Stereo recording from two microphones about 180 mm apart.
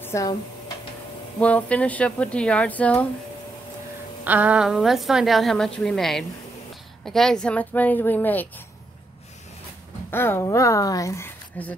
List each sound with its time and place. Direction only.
0.0 s speech: 20° left (ahead or behind)
1.4 s speech: 5° left (ahead or behind)
4.2 s a woman's voice: 10° right (ahead or behind); by 8.5 s 10° left (ahead or behind)
10.1 s speech: 15° left (ahead or behind)